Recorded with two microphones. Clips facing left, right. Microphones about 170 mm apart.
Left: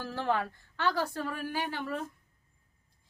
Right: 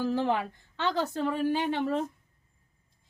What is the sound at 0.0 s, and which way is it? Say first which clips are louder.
A woman's voice: right 4 dB; 20° right (ahead or behind).